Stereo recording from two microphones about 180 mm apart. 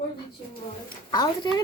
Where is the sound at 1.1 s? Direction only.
25° left (ahead or behind).